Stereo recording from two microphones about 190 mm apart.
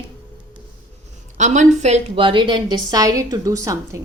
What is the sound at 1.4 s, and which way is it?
A woman's voice, 40° right (ahead or behind).